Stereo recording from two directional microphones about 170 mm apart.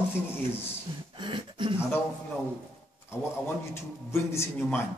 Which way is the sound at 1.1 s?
30° right (ahead or behind).